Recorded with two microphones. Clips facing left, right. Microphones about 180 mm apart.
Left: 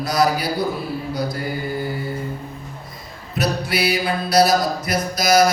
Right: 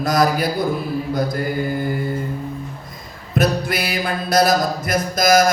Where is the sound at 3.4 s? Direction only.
50° right (ahead or behind).